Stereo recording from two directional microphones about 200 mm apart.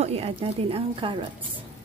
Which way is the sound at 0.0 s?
30° right (ahead or behind).